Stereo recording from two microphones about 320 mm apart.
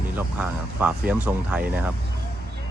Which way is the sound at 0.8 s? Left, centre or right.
Centre.